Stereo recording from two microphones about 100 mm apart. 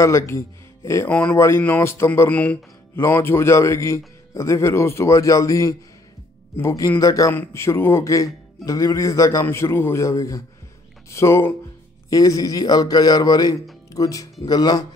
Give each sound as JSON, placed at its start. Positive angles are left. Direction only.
{"t": 0.0, "sound": "a man's voice", "side_deg": 30}
{"t": 2.2, "sound": "speech", "side_deg": 15}
{"t": 3.0, "sound": "a man's voice", "side_deg": 25}